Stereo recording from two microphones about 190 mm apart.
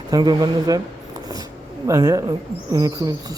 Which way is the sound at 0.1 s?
20° right (ahead or behind).